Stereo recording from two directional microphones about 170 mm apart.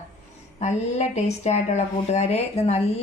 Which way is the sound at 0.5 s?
45° left (ahead or behind).